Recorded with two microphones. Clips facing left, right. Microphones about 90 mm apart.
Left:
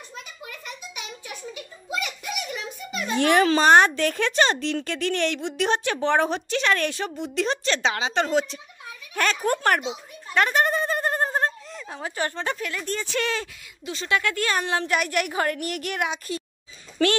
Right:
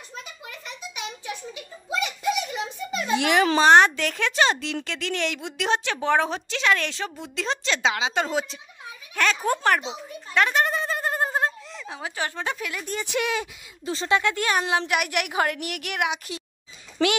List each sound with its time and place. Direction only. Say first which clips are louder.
1.9 s a sound: right 5 dB; 25° right (ahead or behind)
3.2 s a woman's voice: left 2 dB; 5° right (ahead or behind)
13.8 s a woman's voice: right 2 dB; 30° right (ahead or behind); by 16.4 s 15° right (ahead or behind)